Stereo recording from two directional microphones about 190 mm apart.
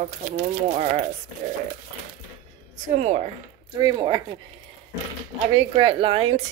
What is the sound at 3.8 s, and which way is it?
Speech, 20° right (ahead or behind).